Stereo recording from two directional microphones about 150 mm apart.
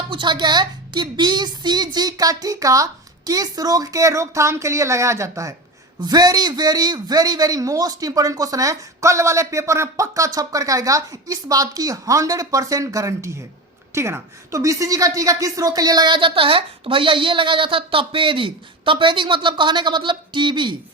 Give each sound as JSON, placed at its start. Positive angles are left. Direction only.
{"t": 0.1, "sound": "a man's voice", "side_deg": -30}